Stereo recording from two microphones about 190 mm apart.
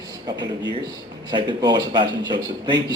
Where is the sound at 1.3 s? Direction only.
25° right (ahead or behind).